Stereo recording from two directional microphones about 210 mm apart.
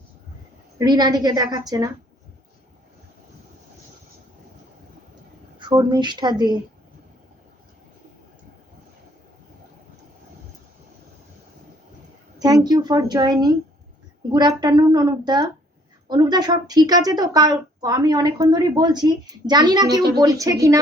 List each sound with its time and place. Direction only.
0.8 s a woman's voice: 20° right (ahead or behind)
5.5 s a woman's voice: 20° right (ahead or behind)
12.4 s a woman's voice: 20° right (ahead or behind)